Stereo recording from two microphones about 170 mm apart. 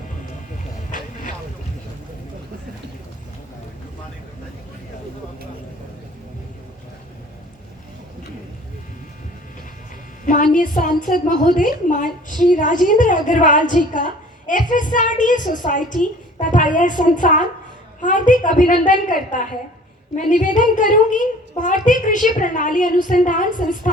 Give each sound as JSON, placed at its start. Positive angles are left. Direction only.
{"t": 0.9, "sound": "boat", "side_deg": 50}
{"t": 10.2, "sound": "a child's voice", "side_deg": 50}